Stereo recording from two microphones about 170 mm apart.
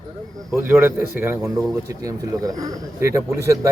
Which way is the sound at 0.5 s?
15° right (ahead or behind).